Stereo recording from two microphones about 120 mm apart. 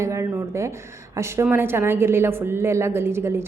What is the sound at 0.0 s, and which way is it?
A woman's voice, 25° right (ahead or behind).